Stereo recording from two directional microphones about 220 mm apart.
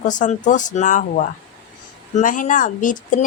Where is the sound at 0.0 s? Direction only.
35° left (ahead or behind).